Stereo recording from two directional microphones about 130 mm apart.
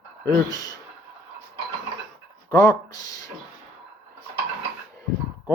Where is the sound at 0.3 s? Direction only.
30° left (ahead or behind).